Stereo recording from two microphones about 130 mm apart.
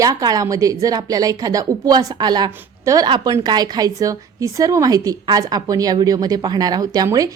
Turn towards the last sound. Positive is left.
turn(degrees=-30)  # may be behind; listen again after turning